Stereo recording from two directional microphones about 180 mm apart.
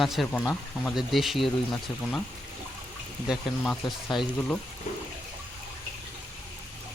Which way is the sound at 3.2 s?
5° left (ahead or behind).